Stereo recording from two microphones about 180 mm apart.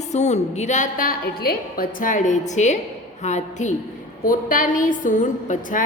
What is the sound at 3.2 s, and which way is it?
A woman's voice, 40° left (ahead or behind).